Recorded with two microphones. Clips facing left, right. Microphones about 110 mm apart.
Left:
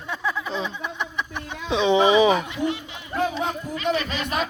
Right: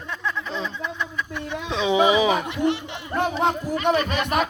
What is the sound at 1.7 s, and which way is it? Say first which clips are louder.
Speech: left 1 dB; centre (ahead or behind).